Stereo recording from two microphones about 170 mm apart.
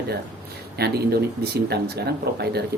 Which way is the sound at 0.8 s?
70° right (ahead or behind).